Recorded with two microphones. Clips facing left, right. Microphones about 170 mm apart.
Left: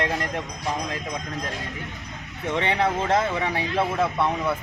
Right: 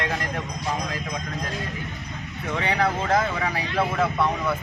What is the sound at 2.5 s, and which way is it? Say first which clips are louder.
Speech: left 1 dB; 25° left (ahead or behind).